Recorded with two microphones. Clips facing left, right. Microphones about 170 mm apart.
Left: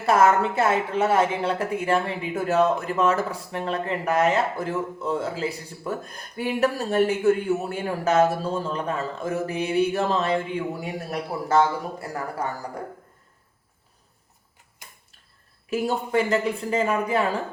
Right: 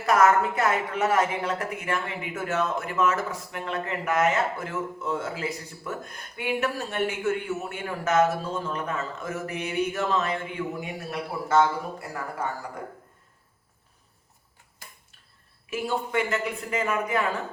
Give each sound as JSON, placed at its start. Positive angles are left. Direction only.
{"t": 0.0, "sound": "a woman's voice", "side_deg": 30}
{"t": 15.7, "sound": "a woman's voice", "side_deg": 35}